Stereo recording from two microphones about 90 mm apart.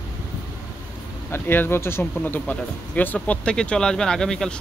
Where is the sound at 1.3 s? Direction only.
25° left (ahead or behind); by 4.5 s 5° left (ahead or behind).